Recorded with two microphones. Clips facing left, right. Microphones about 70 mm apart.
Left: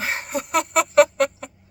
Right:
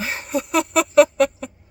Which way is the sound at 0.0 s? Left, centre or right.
Left.